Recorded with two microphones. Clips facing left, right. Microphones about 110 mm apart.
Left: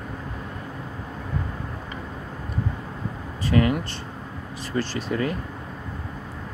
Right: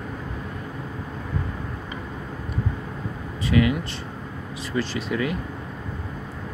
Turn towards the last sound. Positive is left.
turn(degrees=40)  # may be behind; listen again after turning